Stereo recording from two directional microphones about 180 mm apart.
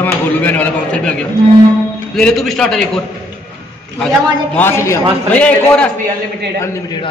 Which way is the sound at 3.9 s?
5° left (ahead or behind).